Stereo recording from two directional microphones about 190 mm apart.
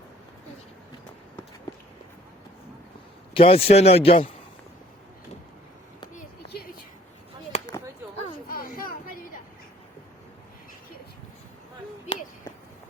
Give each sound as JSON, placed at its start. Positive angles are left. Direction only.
{"t": 3.3, "sound": "a man's voice", "side_deg": 30}
{"t": 7.5, "sound": "chop", "side_deg": 35}
{"t": 8.4, "sound": "a sound", "side_deg": 50}